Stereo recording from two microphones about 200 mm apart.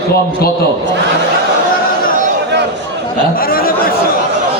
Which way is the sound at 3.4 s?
45° left (ahead or behind).